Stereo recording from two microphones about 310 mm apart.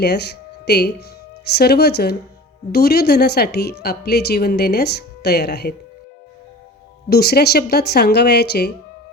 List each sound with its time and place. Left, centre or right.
0.0 s a woman's voice: left
7.1 s a woman's voice: left